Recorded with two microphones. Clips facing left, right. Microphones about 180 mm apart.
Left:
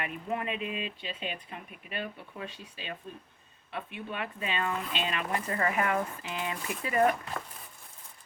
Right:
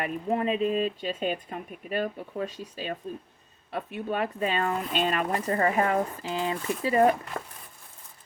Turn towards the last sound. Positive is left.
turn(degrees=-30)  # may be behind; listen again after turning